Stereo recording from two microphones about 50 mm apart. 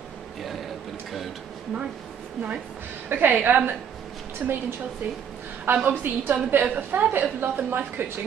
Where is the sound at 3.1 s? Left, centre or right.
Right.